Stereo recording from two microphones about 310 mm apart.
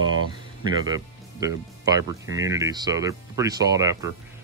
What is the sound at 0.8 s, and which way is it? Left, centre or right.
Speech, centre.